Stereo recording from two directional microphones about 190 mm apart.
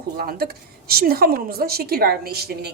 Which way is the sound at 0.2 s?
55° right (ahead or behind).